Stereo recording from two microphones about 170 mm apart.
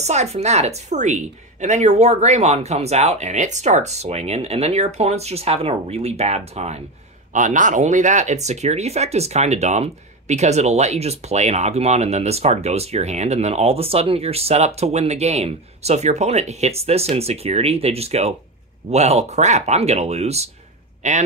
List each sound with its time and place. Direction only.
0.0 s a man's voice: 40° right (ahead or behind)